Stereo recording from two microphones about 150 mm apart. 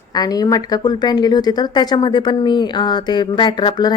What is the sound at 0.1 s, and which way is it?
A woman's voice, 25° left (ahead or behind).